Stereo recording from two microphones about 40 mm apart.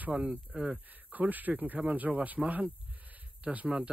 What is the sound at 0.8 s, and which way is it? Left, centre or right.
Speech, right.